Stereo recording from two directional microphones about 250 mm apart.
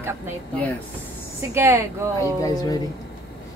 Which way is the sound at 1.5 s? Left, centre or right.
Centre.